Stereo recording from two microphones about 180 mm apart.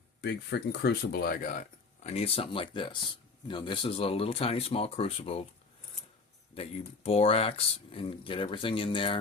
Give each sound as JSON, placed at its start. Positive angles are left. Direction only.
{"t": 0.2, "sound": "speech", "side_deg": 65}
{"t": 2.0, "sound": "speech", "side_deg": 35}
{"t": 6.5, "sound": "speech", "side_deg": 35}